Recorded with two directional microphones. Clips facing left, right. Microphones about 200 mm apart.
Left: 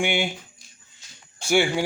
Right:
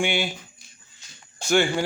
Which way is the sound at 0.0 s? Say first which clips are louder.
Left 1 dB; 15° left (ahead or behind).